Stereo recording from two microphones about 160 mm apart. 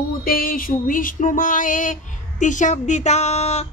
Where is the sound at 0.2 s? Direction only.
60° left (ahead or behind).